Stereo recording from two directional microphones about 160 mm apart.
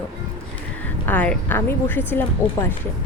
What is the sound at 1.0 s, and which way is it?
Speech, 10° left (ahead or behind).